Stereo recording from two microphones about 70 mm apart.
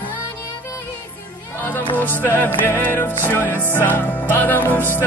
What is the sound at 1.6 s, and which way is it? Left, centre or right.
Music, left.